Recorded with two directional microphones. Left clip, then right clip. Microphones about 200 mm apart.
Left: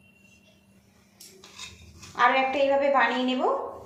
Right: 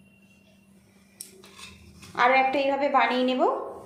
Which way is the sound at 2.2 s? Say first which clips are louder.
Right 1 dB; 45° right (ahead or behind).